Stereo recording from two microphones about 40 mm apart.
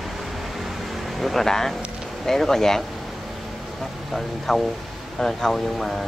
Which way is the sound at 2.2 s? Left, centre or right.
Centre.